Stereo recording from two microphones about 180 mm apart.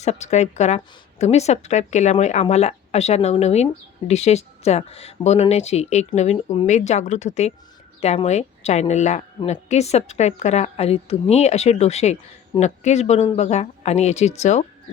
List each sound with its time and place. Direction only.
0.0 s speech: 40° left (ahead or behind)